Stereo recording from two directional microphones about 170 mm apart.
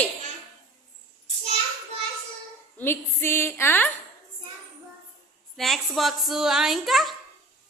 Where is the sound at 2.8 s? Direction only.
15° left (ahead or behind).